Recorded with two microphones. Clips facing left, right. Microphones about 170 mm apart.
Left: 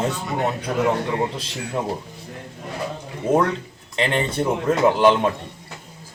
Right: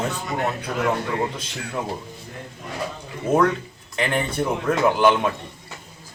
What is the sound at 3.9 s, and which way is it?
Speech, 25° left (ahead or behind).